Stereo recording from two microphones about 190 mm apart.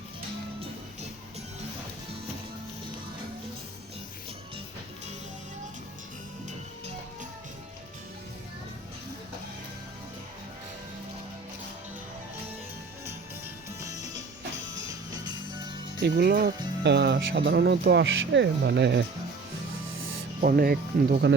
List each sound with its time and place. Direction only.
13.7 s music: 15° right (ahead or behind)
15.1 s music: 20° right (ahead or behind)
16.0 s speech: 60° right (ahead or behind)
20.4 s speech: 50° right (ahead or behind)